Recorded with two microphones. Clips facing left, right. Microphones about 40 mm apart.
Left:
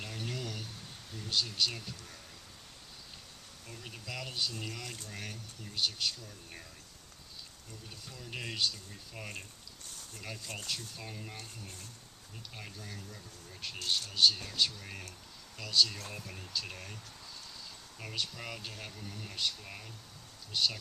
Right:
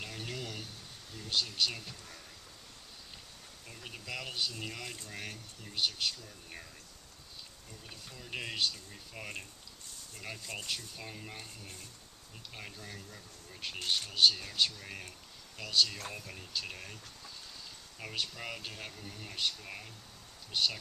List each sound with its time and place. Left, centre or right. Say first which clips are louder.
0.0 s a sound: left 1 dB; centre
1.1 s speech: even; centre
3.7 s speech: right 1 dB; centre
7.9 s speech: right 2 dB; centre
13.7 s speech: even; right
14.1 s speech: right 1 dB; centre
18.0 s speech: right 1 dB; centre